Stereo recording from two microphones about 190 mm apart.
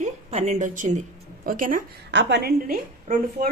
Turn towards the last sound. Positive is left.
turn(degrees=-45)  # may be behind; listen again after turning